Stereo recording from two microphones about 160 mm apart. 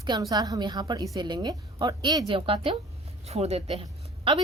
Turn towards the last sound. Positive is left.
turn(degrees=-35)  # may be behind; listen again after turning